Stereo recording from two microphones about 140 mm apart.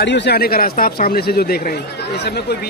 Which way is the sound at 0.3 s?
90° left.